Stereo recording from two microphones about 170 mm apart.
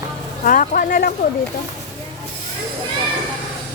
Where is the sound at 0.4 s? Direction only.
50° left (ahead or behind).